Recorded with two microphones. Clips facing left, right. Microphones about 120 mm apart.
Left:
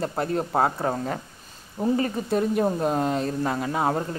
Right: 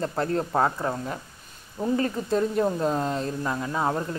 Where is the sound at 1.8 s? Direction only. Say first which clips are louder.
Left 1 dB; 10° left (ahead or behind).